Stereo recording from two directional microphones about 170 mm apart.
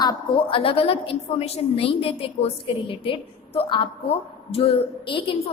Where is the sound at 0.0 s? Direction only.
25° left (ahead or behind).